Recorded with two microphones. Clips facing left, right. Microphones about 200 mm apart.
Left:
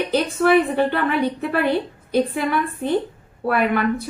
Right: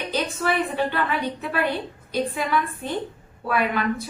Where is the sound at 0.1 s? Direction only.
55° left (ahead or behind).